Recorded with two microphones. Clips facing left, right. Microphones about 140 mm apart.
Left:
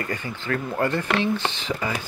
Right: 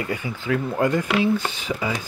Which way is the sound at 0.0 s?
10° right (ahead or behind).